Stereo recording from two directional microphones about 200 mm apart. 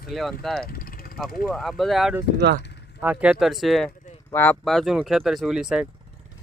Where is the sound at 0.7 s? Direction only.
45° left (ahead or behind).